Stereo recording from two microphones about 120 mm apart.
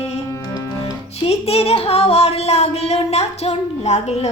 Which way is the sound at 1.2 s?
55° left (ahead or behind).